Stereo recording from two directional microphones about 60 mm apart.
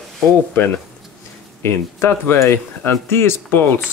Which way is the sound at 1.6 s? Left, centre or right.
Left.